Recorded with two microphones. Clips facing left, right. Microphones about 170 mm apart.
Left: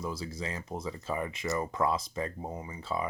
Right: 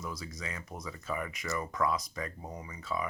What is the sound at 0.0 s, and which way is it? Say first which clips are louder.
Speech: left 5 dB; 30° left (ahead or behind).